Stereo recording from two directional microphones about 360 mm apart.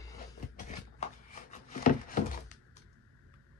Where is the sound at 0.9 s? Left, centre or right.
Centre.